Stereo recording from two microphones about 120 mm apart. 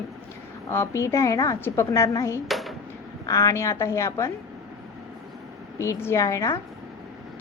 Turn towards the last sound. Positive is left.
turn(degrees=25)  # may be behind; listen again after turning